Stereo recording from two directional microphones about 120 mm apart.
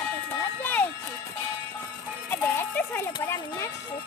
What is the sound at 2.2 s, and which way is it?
Music, 20° left (ahead or behind).